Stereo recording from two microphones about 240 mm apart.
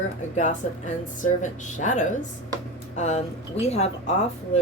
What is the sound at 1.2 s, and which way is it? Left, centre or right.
Speech, left.